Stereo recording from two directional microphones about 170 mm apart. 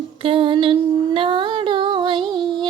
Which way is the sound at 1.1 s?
30° right (ahead or behind).